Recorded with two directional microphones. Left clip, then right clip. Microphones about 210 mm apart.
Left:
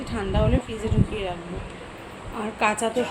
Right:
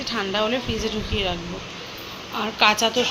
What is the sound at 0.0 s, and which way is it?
A woman's voice, centre (ahead or behind).